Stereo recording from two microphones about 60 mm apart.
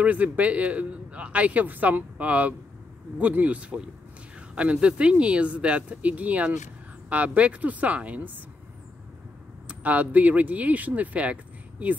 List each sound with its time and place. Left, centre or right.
0.0 s a man's voice: right
9.7 s a man's voice: right